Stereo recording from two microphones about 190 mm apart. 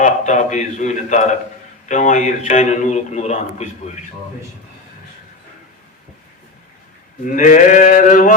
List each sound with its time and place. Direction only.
0.0 s a man's voice: 40° left (ahead or behind)
7.3 s sheep: 45° left (ahead or behind)